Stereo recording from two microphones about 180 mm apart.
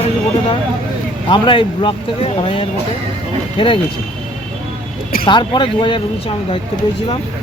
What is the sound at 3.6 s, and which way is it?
Speech, 25° left (ahead or behind).